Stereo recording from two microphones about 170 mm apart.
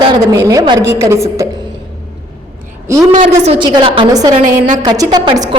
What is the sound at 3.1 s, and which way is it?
A woman's voice, 40° right (ahead or behind).